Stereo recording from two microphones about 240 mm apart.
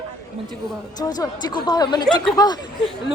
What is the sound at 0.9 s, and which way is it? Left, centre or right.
Speech, centre.